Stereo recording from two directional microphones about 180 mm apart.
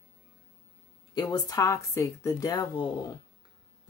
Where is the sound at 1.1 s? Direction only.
20° left (ahead or behind).